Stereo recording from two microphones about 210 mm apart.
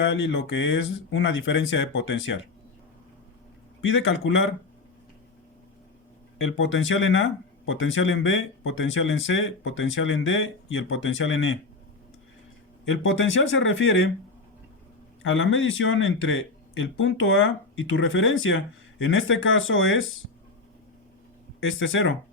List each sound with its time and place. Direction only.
0.0 s speech: 60° left (ahead or behind)
3.8 s speech: 60° left (ahead or behind)
6.4 s speech: 65° left (ahead or behind)
12.8 s speech: 65° left (ahead or behind)
15.2 s speech: 70° left (ahead or behind)
21.6 s speech: 70° left (ahead or behind)